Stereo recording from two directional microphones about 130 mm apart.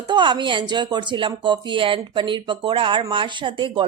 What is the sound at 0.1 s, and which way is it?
Speech, 35° right (ahead or behind).